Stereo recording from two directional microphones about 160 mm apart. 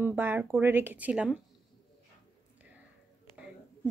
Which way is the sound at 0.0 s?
10° right (ahead or behind).